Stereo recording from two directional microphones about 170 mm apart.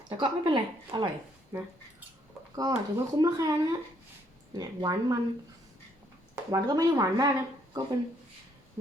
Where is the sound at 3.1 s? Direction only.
25° right (ahead or behind).